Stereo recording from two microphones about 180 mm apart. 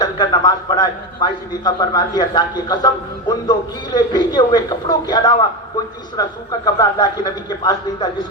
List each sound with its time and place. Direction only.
0.0 s a man's voice: 20° left (ahead or behind)